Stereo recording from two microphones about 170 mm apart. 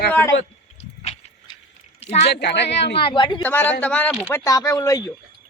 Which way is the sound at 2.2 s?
80° left.